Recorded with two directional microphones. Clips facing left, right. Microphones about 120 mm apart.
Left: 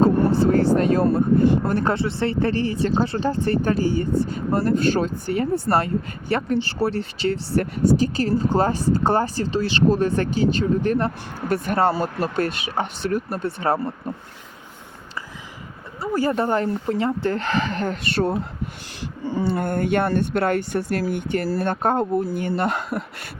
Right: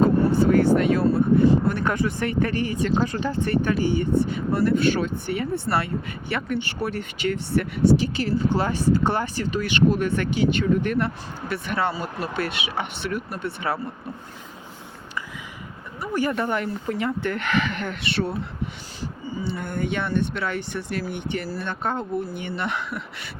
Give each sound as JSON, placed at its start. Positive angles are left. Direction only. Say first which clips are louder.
{"t": 0.0, "sound": "vehicle", "louder": "left 1 dB", "side_deg": 35}
{"t": 1.0, "sound": "speech", "louder": "left 1 dB", "side_deg": 55}
{"t": 1.6, "sound": "speech", "louder": "left 2 dB", "side_deg": 35}
{"t": 16.0, "sound": "speech", "louder": "left 3 dB", "side_deg": 30}
{"t": 19.2, "sound": "speech", "louder": "left 8 dB", "side_deg": 90}
{"t": 19.5, "sound": "speech", "louder": "left 5 dB", "side_deg": 50}